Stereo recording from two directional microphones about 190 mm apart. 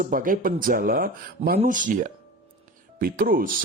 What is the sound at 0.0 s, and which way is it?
Speech, 45° right (ahead or behind).